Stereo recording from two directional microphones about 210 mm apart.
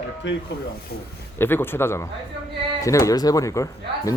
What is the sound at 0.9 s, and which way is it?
Speech, 50° left (ahead or behind).